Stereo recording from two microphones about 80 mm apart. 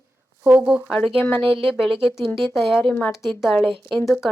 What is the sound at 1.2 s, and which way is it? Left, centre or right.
Speech, left.